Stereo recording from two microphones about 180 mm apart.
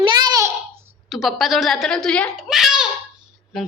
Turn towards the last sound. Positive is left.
turn(degrees=0)  # may be behind; listen again after turning